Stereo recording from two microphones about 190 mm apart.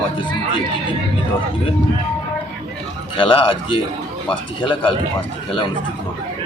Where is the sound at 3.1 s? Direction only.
25° left (ahead or behind).